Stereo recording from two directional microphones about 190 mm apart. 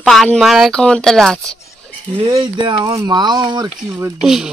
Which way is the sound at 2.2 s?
25° right (ahead or behind).